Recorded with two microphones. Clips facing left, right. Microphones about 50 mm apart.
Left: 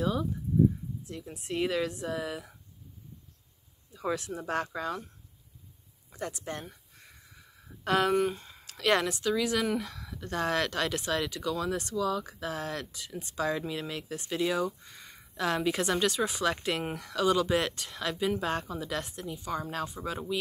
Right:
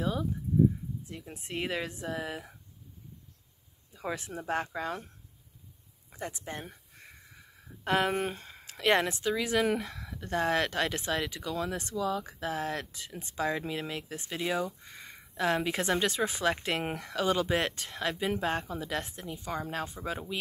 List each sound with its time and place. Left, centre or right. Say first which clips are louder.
0.0 s speech: left 2 dB; right
1.0 s a sound: left 3 dB; right
1.3 s speech: left 4 dB; right
3.9 s speech: left 3 dB; right
6.2 s a sound: left 2 dB; right
8.2 s speech: left 5 dB; right